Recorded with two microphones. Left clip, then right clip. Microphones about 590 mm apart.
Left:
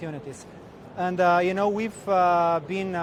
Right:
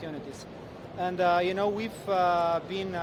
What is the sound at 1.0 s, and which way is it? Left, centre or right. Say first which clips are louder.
Speech: left 4 dB; left.